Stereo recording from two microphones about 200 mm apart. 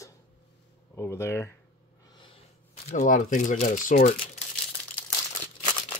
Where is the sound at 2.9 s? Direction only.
40° left (ahead or behind).